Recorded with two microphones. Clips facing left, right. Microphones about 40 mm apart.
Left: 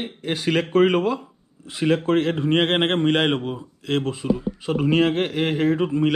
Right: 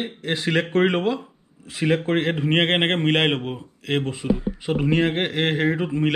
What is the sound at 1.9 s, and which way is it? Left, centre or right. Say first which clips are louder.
Speech: left 1 dB; right.